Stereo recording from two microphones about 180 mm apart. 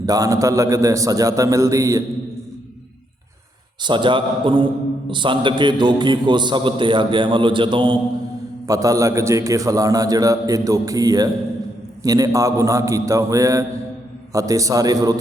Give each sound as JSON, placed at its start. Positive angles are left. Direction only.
{"t": 0.0, "sound": "a man's voice", "side_deg": -20}
{"t": 3.8, "sound": "a man's voice", "side_deg": -25}